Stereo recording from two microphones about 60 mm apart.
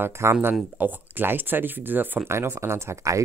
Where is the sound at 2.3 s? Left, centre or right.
Right.